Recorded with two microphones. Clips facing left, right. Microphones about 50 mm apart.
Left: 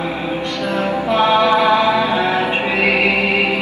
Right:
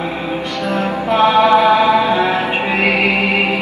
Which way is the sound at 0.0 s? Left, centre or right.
Centre.